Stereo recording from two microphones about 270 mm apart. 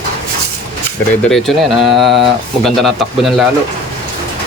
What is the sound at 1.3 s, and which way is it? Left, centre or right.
Speech, centre.